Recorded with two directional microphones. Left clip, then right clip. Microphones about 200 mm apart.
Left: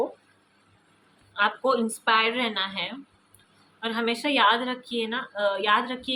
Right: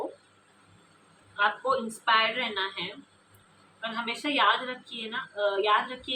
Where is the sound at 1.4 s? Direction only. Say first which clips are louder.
Left 3 dB; 55° left (ahead or behind).